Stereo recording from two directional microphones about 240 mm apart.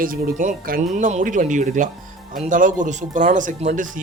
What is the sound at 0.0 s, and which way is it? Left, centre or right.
Speech, right.